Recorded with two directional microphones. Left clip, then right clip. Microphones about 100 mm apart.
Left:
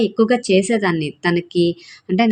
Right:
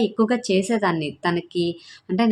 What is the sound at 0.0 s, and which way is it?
A woman's voice, 30° left (ahead or behind).